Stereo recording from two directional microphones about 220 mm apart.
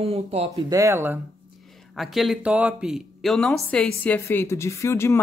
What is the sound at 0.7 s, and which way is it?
Speech, 10° right (ahead or behind).